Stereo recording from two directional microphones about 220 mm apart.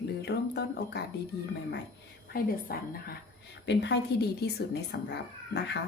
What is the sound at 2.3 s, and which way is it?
Speech, 45° left (ahead or behind).